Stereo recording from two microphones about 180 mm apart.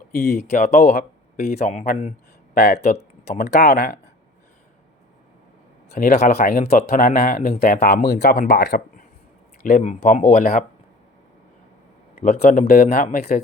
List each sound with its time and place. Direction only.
0.1 s speech: 60° left (ahead or behind)
1.4 s speech: 40° left (ahead or behind)
2.6 s speech: 65° left (ahead or behind)
3.6 s speech: 50° left (ahead or behind)
5.9 s speech: 45° left (ahead or behind); by 9.0 s 65° left (ahead or behind)
9.6 s speech: 40° left (ahead or behind)
12.4 s speech: 55° left (ahead or behind)